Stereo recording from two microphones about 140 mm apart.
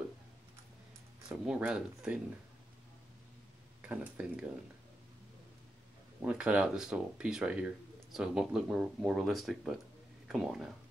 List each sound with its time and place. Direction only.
1.3 s speech: 10° right (ahead or behind)
3.8 s speech: 10° right (ahead or behind)
6.2 s speech: 10° right (ahead or behind)